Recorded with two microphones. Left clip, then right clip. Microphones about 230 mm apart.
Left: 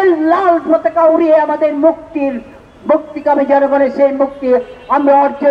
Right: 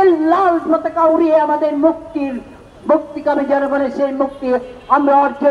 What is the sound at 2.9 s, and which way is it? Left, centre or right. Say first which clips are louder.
A man's voice: left 3 dB; left.